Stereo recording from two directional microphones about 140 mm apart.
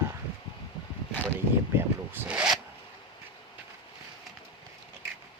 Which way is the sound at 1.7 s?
15° right (ahead or behind).